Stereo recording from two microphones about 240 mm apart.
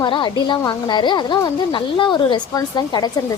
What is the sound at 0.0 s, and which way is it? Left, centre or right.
Speech, centre.